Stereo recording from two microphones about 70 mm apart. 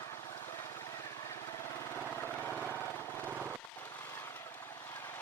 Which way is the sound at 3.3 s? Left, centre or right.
Right.